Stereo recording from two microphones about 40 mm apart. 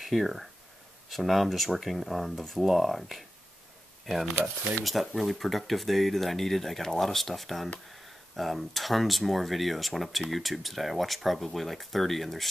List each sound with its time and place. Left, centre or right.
0.0 s speech: centre